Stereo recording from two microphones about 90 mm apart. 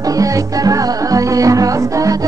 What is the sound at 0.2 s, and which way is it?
Music, 40° right (ahead or behind).